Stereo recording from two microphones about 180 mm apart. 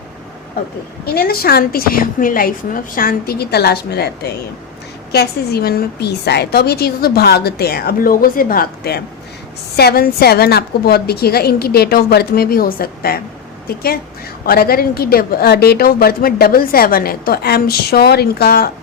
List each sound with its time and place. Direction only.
1.1 s a woman's voice: 55° left (ahead or behind)